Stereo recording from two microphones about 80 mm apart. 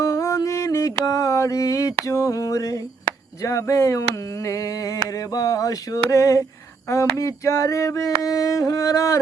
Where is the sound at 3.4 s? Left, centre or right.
Left.